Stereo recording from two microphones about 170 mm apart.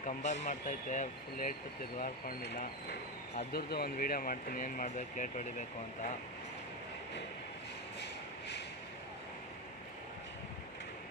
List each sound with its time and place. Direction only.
0.0 s speech: 45° left (ahead or behind)
3.5 s speech: 65° left (ahead or behind); by 5.6 s 50° left (ahead or behind)
8.0 s a sound: 85° left